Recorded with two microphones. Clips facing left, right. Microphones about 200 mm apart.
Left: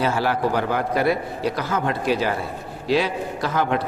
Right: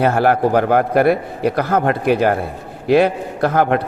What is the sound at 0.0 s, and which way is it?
A man's voice, 55° right (ahead or behind).